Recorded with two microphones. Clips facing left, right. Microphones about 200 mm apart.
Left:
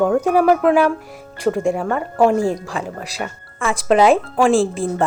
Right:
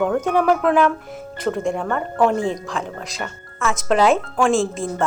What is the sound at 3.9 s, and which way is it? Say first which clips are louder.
Speech: left 3 dB; 10° left (ahead or behind).